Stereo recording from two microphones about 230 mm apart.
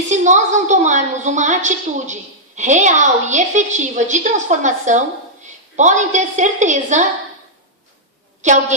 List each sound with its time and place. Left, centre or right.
0.1 s a woman's voice: right
8.4 s a woman's voice: right